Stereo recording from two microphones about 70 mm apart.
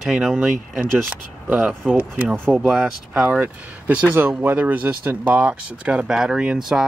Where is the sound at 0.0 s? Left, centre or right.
Centre.